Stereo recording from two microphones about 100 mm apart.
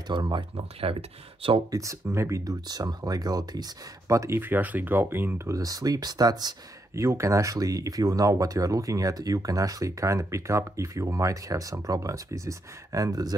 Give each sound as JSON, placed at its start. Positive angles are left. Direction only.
{"t": 0.1, "sound": "speech", "side_deg": -50}
{"t": 0.6, "sound": "speech", "side_deg": -70}
{"t": 1.7, "sound": "speech", "side_deg": -30}
{"t": 6.9, "sound": "speech", "side_deg": -30}